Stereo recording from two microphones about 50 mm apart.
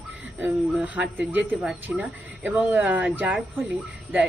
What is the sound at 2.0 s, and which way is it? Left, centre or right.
Speech, right.